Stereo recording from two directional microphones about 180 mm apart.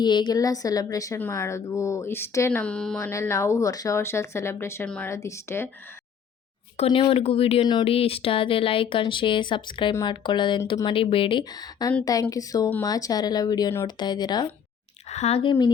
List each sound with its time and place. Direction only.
0.0 s a woman's voice: 25° left (ahead or behind); by 3.1 s 5° left (ahead or behind)
3.1 s a woman's voice: 15° left (ahead or behind)
6.7 s speech: 30° left (ahead or behind)
15.1 s speech: 35° left (ahead or behind)